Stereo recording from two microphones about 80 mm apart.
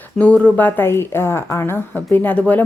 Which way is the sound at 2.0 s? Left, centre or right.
Left.